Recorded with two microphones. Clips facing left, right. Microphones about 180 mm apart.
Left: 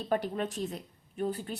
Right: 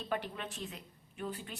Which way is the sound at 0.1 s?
40° left (ahead or behind).